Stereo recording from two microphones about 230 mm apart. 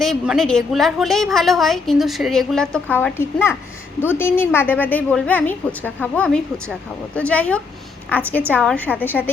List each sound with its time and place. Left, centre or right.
0.0 s a woman's voice: centre